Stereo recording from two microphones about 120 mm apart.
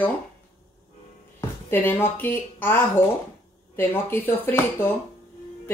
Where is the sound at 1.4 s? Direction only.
20° left (ahead or behind).